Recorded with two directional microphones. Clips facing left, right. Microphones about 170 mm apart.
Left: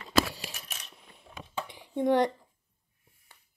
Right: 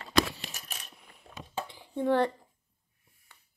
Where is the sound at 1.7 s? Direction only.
15° left (ahead or behind).